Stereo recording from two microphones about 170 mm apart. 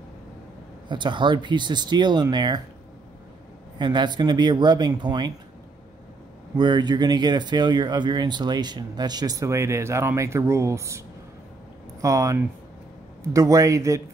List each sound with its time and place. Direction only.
0.8 s speech: 25° right (ahead or behind)
3.7 s speech: 25° right (ahead or behind)
6.5 s speech: 25° right (ahead or behind)
12.0 s speech: 20° right (ahead or behind)